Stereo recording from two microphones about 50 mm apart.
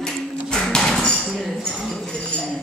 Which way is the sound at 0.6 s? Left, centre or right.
Centre.